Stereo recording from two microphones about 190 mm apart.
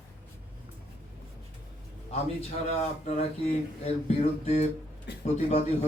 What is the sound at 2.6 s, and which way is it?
Speech, 35° left (ahead or behind).